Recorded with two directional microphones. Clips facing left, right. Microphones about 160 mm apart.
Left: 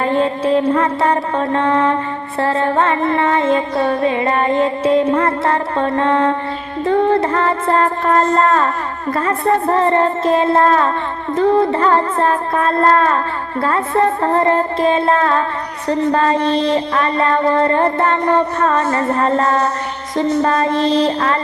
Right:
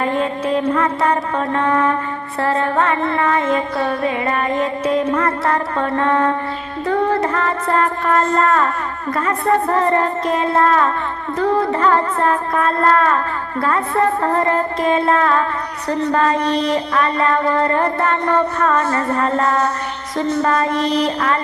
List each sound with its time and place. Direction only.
0.0 s mantra: 30° left (ahead or behind)
2.4 s music: 30° left (ahead or behind)